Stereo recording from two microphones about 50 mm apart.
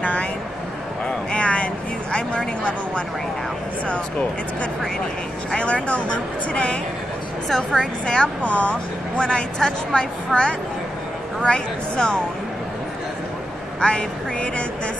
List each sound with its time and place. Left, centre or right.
0.0 s a sound: left
2.1 s vehicle: centre
3.9 s speech: left
7.4 s speech: centre
8.5 s speech: left
9.6 s speech: centre
13.7 s speech: centre